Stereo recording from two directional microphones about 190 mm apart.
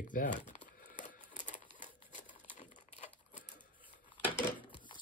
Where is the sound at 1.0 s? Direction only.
40° left (ahead or behind).